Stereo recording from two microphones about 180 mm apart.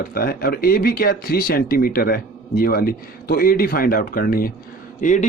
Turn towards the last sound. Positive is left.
turn(degrees=45)  # may be behind; listen again after turning